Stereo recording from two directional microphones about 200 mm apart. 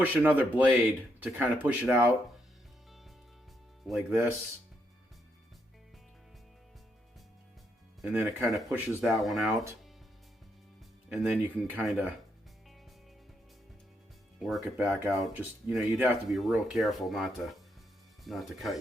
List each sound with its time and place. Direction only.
0.0 s speech: 10° right (ahead or behind)
3.8 s speech: 5° right (ahead or behind)
8.0 s speech: 10° right (ahead or behind)
11.1 s speech: 5° right (ahead or behind)
14.3 s speech: centre (ahead or behind)